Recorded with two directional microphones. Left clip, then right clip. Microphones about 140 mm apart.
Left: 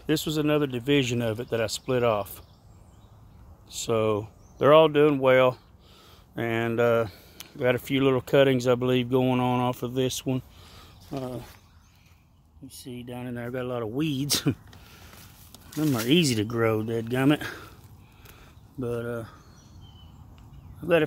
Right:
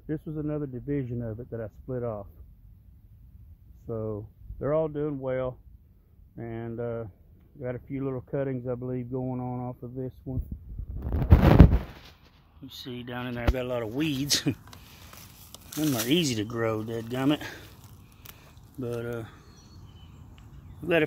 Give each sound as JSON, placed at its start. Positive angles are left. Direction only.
{"t": 0.0, "sound": "speech", "side_deg": 30}
{"t": 3.8, "sound": "speech", "side_deg": 35}
{"t": 12.8, "sound": "speech", "side_deg": 10}
{"t": 13.4, "sound": "speech", "side_deg": 30}
{"t": 18.8, "sound": "speech", "side_deg": 40}
{"t": 19.0, "sound": "speech", "side_deg": 25}